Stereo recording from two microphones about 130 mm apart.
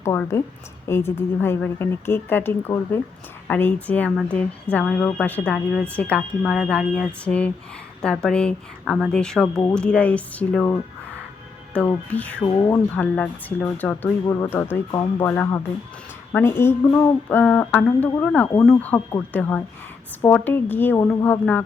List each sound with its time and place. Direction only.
0.0 s a woman's voice: 20° left (ahead or behind)
12.5 s speech: 25° left (ahead or behind)
13.0 s a woman's voice: 10° left (ahead or behind)